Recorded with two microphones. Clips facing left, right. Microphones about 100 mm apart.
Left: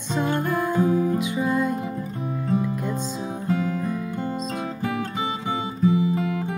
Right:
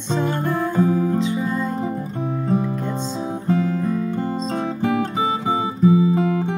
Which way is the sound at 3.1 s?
35° right (ahead or behind).